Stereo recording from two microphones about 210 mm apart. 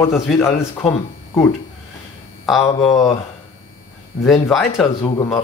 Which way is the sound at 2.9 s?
15° left (ahead or behind).